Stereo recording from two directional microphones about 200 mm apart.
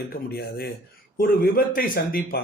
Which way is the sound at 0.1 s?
50° left (ahead or behind).